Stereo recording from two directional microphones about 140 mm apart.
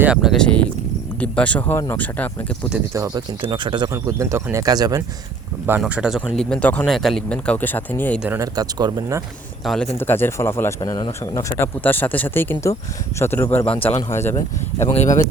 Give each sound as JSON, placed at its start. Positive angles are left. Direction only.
{"t": 0.0, "sound": "speech", "side_deg": -5}
{"t": 2.9, "sound": "speech", "side_deg": -20}
{"t": 3.4, "sound": "speech", "side_deg": -35}
{"t": 3.9, "sound": "speech", "side_deg": -20}
{"t": 5.9, "sound": "speech", "side_deg": -5}
{"t": 6.3, "sound": "speech", "side_deg": 5}
{"t": 8.4, "sound": "speech", "side_deg": -30}
{"t": 9.6, "sound": "speech", "side_deg": 5}
{"t": 10.0, "sound": "speech", "side_deg": 15}
{"t": 13.7, "sound": "speech", "side_deg": 40}
{"t": 14.1, "sound": "speech", "side_deg": 20}
{"t": 14.8, "sound": "speech", "side_deg": 55}